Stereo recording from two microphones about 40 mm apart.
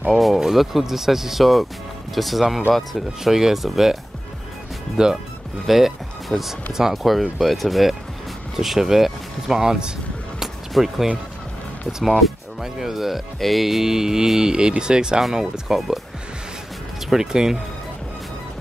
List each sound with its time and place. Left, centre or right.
0.2 s speech: centre
4.9 s speech: centre
5.7 s speech: centre
8.5 s speech: centre
10.7 s speech: centre
12.0 s music: centre
13.4 s speech: centre
17.1 s speech: centre